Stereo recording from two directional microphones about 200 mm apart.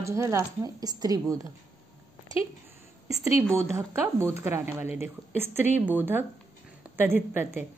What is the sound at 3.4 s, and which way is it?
A woman's voice, 15° right (ahead or behind).